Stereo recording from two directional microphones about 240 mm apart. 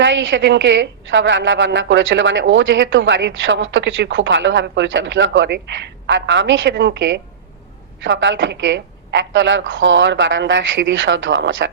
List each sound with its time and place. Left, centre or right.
0.0 s a woman's voice: right